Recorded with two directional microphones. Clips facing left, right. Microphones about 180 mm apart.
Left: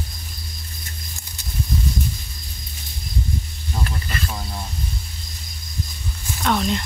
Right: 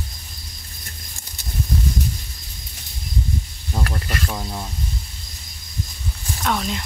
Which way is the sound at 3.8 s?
65° right (ahead or behind).